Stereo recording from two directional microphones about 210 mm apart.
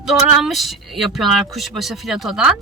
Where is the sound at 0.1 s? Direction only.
Centre (ahead or behind).